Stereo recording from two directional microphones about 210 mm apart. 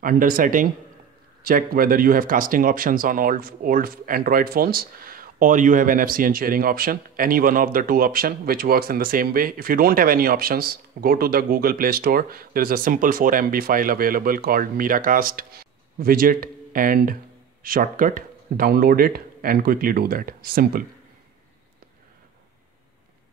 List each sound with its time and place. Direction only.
0.0 s speech: 40° right (ahead or behind)